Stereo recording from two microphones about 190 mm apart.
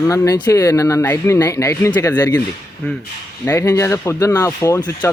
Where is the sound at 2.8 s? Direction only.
5° left (ahead or behind).